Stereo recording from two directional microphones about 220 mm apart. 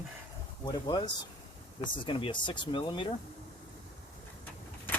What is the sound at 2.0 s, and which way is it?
Speech, 25° left (ahead or behind).